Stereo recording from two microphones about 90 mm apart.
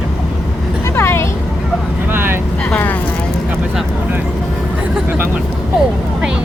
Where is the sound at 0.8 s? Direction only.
30° left (ahead or behind).